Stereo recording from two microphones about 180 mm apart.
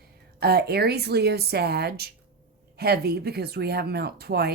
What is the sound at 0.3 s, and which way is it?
Speech, 60° right (ahead or behind).